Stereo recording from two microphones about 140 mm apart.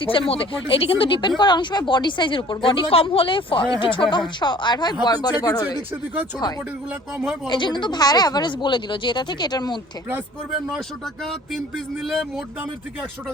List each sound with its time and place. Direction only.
0.0 s speech: 40° left (ahead or behind)
10.7 s speech: centre (ahead or behind)